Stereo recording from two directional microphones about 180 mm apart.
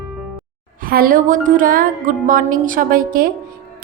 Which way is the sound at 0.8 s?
50° right (ahead or behind).